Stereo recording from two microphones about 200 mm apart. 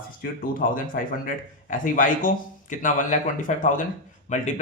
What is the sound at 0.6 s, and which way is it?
A man's voice, 45° left (ahead or behind).